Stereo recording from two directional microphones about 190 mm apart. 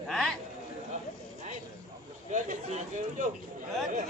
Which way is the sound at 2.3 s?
40° right (ahead or behind).